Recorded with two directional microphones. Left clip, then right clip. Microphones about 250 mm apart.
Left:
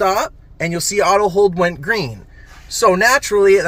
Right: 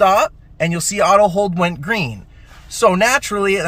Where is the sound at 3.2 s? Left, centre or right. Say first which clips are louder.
Left 5 dB; centre.